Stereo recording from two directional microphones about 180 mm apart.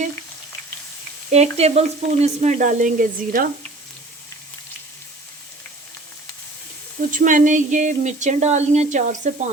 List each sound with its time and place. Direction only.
1.3 s speech: 35° right (ahead or behind)
7.1 s speech: 45° right (ahead or behind)